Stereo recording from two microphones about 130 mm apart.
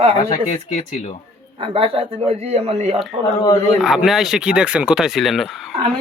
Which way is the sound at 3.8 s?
Centre (ahead or behind).